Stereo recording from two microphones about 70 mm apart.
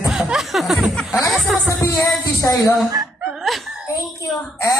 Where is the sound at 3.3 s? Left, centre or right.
Centre.